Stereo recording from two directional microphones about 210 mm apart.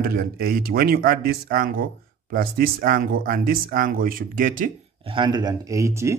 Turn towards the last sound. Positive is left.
turn(degrees=-15)  # may be behind; listen again after turning